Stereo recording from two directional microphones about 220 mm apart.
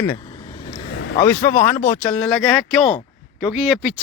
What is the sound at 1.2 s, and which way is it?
A man's voice, 10° left (ahead or behind).